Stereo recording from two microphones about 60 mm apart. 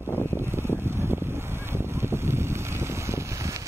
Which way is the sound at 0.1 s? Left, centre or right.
Left.